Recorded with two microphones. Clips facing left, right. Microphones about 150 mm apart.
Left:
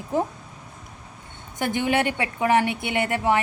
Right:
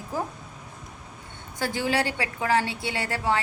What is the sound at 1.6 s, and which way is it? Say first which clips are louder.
A woman's voice: left 3 dB; 20° left (ahead or behind).